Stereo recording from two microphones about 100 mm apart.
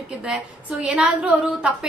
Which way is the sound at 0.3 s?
10° right (ahead or behind).